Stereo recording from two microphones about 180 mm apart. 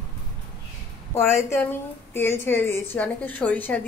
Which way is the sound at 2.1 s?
15° left (ahead or behind).